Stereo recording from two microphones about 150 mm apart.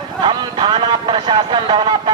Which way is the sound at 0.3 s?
30° right (ahead or behind).